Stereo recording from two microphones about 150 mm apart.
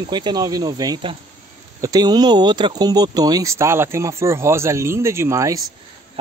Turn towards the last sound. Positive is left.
turn(degrees=-20)  # may be behind; listen again after turning